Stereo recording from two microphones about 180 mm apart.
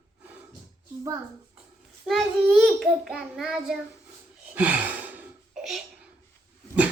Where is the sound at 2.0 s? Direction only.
Centre (ahead or behind).